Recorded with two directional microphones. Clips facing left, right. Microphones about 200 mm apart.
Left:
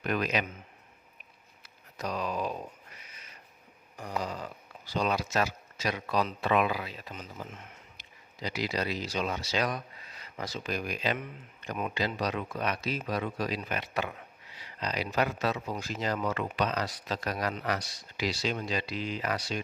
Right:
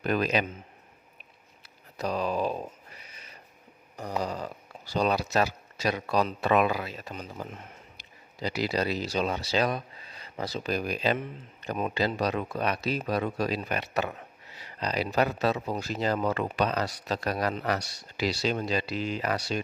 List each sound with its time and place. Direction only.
0.0 s speech: 35° right (ahead or behind)
2.0 s a sound: 30° right (ahead or behind)
3.9 s speech: 35° right (ahead or behind)